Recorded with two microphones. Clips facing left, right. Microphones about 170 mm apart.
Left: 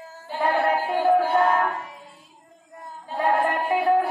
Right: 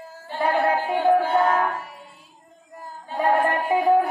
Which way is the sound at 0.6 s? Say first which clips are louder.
Right 1 dB; 20° right (ahead or behind).